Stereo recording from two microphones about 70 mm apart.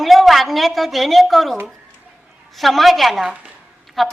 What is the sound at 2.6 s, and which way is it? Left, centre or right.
Speech, centre.